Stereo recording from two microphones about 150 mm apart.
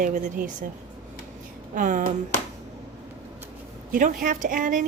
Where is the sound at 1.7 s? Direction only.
60° right (ahead or behind).